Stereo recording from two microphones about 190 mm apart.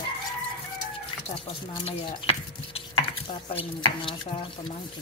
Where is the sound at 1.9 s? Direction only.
30° left (ahead or behind).